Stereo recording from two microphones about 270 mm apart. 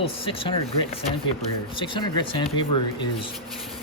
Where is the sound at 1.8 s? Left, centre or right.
Centre.